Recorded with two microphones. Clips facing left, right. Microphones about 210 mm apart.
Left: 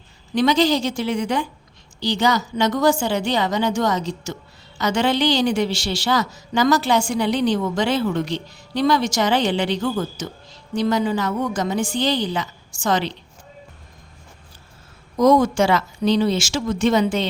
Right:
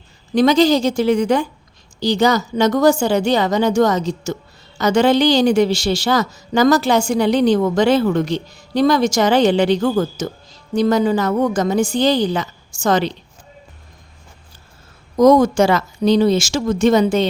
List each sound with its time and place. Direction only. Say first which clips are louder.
0.3 s a woman's voice: right 5 dB; 45° right (ahead or behind)
15.2 s a woman's voice: right 4 dB; 40° right (ahead or behind)